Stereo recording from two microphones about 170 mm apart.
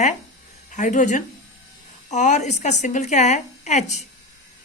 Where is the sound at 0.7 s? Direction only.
45° left (ahead or behind).